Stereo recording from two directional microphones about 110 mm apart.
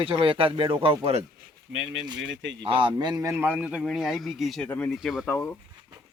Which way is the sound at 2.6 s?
50° right (ahead or behind).